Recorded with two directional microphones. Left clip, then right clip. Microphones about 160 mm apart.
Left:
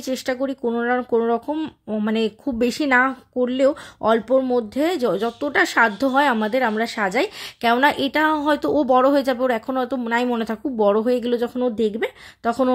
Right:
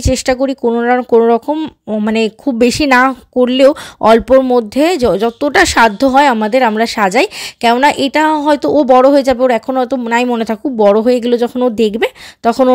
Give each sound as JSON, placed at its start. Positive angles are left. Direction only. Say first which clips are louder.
{"t": 0.0, "sound": "speech", "louder": "right 11 dB", "side_deg": -50}